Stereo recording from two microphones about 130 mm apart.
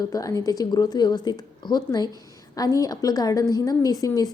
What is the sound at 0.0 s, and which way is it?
A woman's voice, 25° left (ahead or behind).